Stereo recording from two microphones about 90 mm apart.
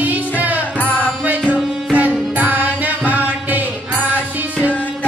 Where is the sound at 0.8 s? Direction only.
15° left (ahead or behind).